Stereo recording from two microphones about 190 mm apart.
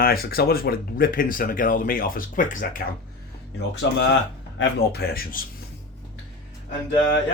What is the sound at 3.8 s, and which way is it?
Speech, 65° left (ahead or behind).